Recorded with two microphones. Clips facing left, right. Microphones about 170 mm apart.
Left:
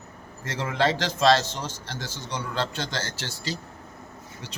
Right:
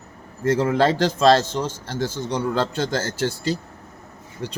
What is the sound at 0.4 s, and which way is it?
A man's voice, 50° right (ahead or behind).